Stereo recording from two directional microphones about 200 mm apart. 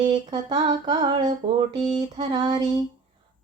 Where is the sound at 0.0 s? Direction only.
20° right (ahead or behind).